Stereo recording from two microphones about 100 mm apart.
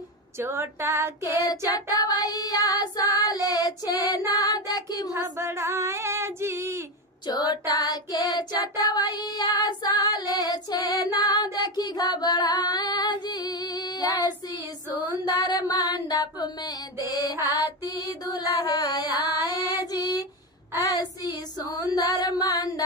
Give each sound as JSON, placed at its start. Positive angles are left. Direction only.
{"t": 0.4, "sound": "female singing", "side_deg": -25}
{"t": 1.7, "sound": "child singing", "side_deg": 40}
{"t": 5.1, "sound": "female singing", "side_deg": -30}
{"t": 7.2, "sound": "child singing", "side_deg": 40}